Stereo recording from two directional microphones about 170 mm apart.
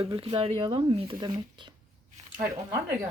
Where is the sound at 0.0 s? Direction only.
30° right (ahead or behind).